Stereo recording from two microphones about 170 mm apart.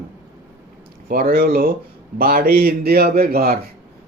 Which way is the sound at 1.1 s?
65° right (ahead or behind).